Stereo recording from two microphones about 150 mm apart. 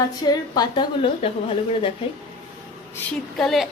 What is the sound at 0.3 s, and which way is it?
A woman's voice, 30° left (ahead or behind).